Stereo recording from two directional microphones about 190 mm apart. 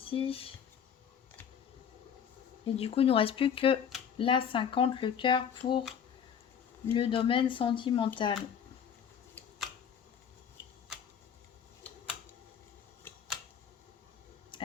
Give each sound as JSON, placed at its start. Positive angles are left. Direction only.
{"t": 0.0, "sound": "speech", "side_deg": 30}
{"t": 2.6, "sound": "speech", "side_deg": 30}
{"t": 6.9, "sound": "speech", "side_deg": 30}
{"t": 13.1, "sound": "a sound", "side_deg": 0}